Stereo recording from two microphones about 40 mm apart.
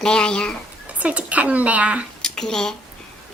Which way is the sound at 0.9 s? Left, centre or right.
Right.